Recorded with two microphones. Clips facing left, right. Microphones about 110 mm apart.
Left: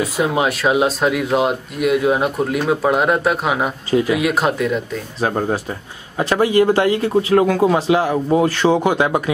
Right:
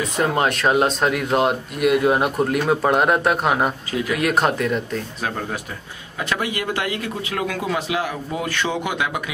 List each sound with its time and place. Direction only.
0.2 s speech: 5° left (ahead or behind)
5.2 s a man's voice: 35° left (ahead or behind)